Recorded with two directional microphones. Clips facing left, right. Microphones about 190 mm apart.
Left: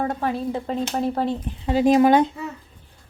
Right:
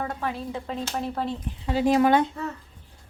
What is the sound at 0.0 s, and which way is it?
Speech, 40° left (ahead or behind).